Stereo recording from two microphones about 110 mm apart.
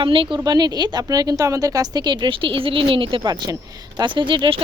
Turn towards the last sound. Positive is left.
turn(degrees=-45)  # may be behind; listen again after turning